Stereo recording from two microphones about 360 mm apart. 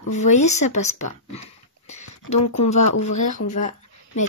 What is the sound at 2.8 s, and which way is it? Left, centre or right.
Speech, left.